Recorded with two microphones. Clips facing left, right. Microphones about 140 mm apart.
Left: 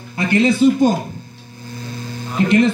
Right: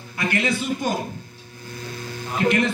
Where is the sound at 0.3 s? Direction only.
30° left (ahead or behind).